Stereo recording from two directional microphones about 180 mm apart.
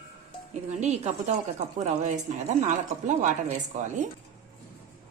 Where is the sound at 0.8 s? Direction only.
40° right (ahead or behind).